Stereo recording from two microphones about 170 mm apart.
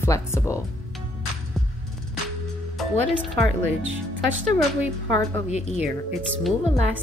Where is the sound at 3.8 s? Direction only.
90° right.